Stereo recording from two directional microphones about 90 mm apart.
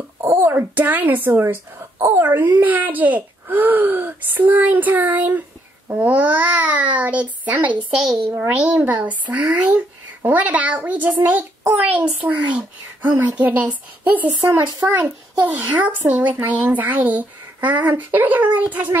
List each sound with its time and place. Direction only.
0.2 s speech: 30° right (ahead or behind)
14.6 s a child's voice: 60° right (ahead or behind)
15.5 s speech: 15° right (ahead or behind)